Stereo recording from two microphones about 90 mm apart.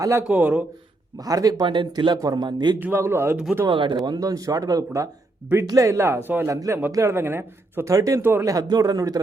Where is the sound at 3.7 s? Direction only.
65° right (ahead or behind); by 6.5 s 25° right (ahead or behind).